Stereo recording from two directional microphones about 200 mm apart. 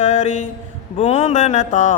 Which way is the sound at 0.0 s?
35° left (ahead or behind).